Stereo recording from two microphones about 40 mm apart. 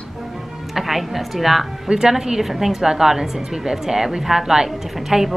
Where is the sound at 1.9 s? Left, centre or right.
Centre.